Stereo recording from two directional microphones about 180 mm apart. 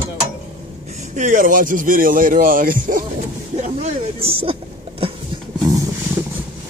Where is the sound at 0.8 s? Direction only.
40° right (ahead or behind).